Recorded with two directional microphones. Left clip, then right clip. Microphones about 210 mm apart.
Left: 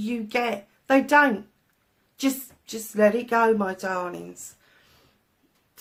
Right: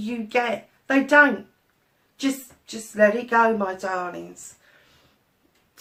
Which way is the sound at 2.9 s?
45° left (ahead or behind).